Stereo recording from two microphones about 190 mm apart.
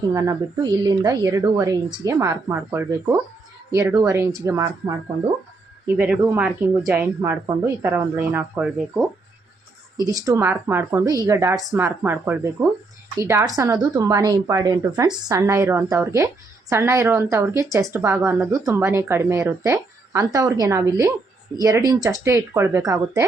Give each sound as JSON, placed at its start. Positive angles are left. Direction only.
{"t": 0.1, "sound": "a woman's voice", "side_deg": -15}
{"t": 10.0, "sound": "a woman's voice", "side_deg": -20}